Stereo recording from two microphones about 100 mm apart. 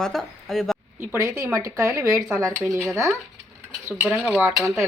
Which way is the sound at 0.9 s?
25° right (ahead or behind).